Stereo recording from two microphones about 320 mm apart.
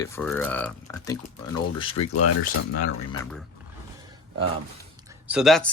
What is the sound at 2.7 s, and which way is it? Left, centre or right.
Speech, left.